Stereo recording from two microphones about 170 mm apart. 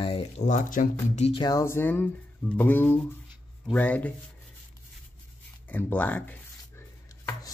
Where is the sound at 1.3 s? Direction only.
25° left (ahead or behind); by 4.1 s 10° left (ahead or behind).